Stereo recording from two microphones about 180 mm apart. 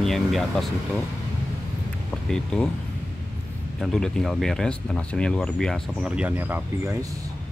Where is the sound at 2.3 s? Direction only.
5° left (ahead or behind).